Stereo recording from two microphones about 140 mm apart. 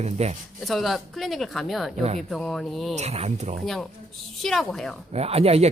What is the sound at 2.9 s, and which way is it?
Speech, 50° right (ahead or behind).